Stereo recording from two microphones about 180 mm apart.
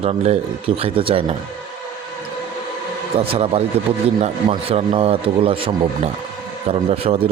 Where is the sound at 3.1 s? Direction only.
35° right (ahead or behind).